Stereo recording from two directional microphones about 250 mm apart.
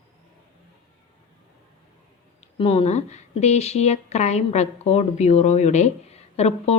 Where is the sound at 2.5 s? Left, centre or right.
Left.